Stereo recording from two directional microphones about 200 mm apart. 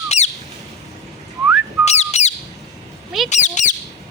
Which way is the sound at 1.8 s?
35° left (ahead or behind).